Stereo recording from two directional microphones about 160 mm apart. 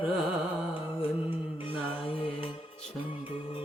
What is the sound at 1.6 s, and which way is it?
Music, 35° left (ahead or behind).